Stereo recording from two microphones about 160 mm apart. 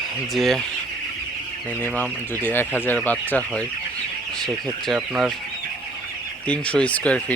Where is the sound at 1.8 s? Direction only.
10° left (ahead or behind).